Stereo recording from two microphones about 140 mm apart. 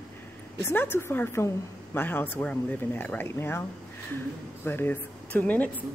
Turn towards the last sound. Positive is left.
turn(degrees=10)  # may be behind; listen again after turning